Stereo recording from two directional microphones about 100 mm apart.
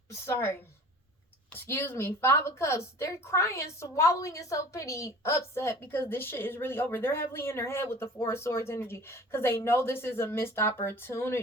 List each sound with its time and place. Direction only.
0.1 s a woman's voice: 25° left (ahead or behind)